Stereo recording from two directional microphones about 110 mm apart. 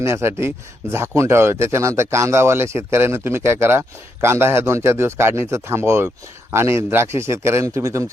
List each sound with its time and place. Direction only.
0.0 s speech: 25° right (ahead or behind)